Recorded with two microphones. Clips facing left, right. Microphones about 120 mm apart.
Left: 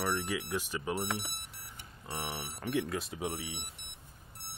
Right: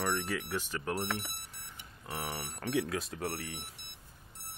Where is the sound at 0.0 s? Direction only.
5° left (ahead or behind).